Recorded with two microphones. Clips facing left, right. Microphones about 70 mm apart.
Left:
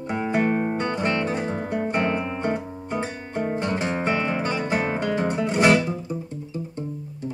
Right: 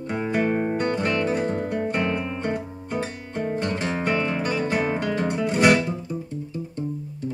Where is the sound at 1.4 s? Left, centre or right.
Centre.